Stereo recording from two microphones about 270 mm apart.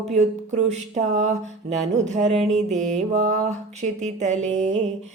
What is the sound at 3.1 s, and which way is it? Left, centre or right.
Speech, right.